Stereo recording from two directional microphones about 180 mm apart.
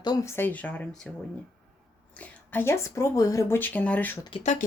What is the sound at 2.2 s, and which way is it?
Speech, 10° left (ahead or behind).